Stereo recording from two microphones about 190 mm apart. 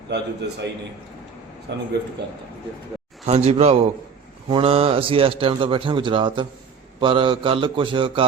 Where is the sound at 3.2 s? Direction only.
35° right (ahead or behind).